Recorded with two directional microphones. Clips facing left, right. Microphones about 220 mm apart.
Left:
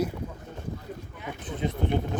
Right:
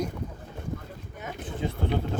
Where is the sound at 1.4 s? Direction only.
20° left (ahead or behind).